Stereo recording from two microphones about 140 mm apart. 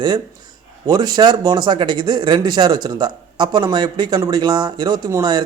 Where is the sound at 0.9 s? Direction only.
30° right (ahead or behind).